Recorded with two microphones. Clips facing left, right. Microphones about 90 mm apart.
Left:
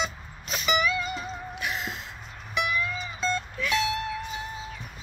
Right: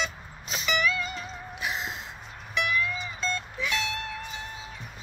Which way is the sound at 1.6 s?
30° right (ahead or behind).